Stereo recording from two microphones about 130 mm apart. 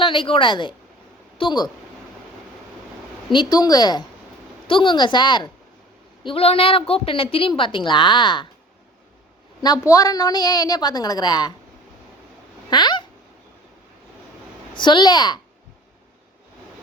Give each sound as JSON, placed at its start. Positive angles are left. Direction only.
{"t": 0.0, "sound": "a woman's voice", "side_deg": 40}
{"t": 3.3, "sound": "a woman's voice", "side_deg": 30}
{"t": 6.2, "sound": "a woman's voice", "side_deg": 50}
{"t": 9.8, "sound": "a woman's voice", "side_deg": 30}
{"t": 12.7, "sound": "a woman's voice", "side_deg": 35}
{"t": 14.8, "sound": "a woman's voice", "side_deg": 35}